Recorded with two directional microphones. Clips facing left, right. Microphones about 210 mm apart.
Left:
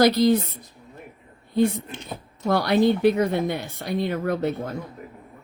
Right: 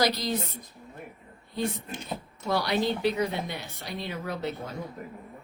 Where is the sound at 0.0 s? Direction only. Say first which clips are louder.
Left 10 dB; 55° left (ahead or behind).